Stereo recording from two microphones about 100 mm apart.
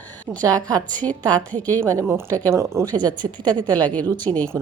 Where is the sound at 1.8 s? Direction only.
35° right (ahead or behind).